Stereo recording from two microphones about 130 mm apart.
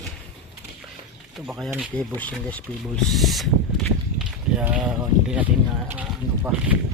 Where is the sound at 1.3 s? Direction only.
Centre (ahead or behind).